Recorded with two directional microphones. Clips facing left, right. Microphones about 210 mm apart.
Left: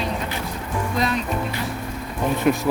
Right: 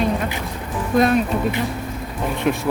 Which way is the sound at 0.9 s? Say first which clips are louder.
Right 9 dB; 55° right (ahead or behind).